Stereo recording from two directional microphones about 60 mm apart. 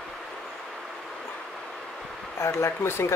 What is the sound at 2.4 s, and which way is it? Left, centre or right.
Speech, left.